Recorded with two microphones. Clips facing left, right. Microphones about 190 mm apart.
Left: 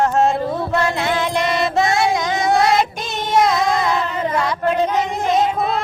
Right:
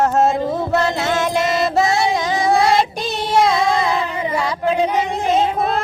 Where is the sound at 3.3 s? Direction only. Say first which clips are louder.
Even; 30° right (ahead or behind).